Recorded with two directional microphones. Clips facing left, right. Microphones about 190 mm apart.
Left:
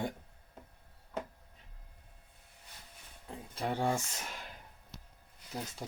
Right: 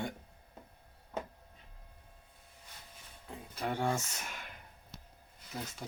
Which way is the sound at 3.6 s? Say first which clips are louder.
Left 1 dB; 30° left (ahead or behind).